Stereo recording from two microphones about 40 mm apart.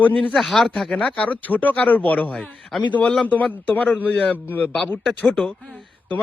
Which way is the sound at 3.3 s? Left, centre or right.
Left.